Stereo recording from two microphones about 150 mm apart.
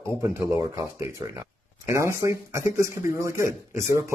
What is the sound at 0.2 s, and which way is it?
Speech, 20° right (ahead or behind).